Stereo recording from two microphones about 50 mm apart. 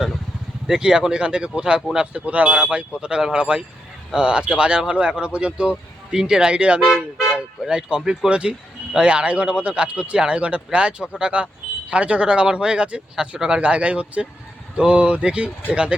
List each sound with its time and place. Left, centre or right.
0.7 s speech: centre